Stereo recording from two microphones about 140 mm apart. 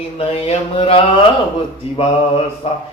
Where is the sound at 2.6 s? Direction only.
45° left (ahead or behind).